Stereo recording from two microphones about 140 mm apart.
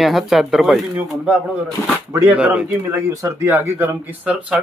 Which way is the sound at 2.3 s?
10° right (ahead or behind).